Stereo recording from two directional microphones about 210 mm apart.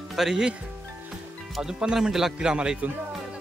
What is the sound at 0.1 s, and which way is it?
Speech, centre (ahead or behind).